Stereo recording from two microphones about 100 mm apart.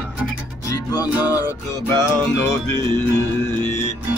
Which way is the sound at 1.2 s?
40° left (ahead or behind).